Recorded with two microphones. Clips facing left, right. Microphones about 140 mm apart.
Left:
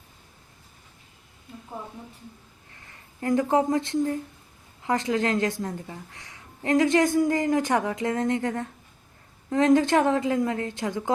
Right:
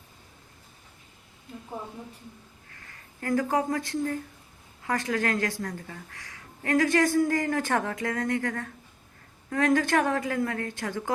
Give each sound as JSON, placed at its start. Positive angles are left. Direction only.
{"t": 2.7, "sound": "speech", "side_deg": 20}